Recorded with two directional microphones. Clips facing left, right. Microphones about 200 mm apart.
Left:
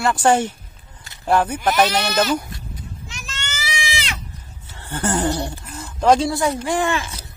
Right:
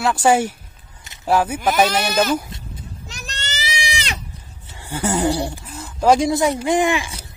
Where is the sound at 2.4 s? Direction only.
25° right (ahead or behind).